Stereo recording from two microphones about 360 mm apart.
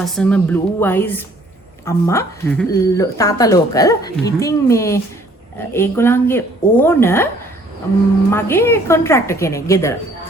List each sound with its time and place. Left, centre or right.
0.0 s speech: centre
8.3 s speech: centre